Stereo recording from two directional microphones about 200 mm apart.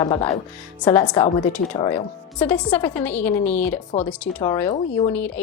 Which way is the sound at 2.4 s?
5° left (ahead or behind).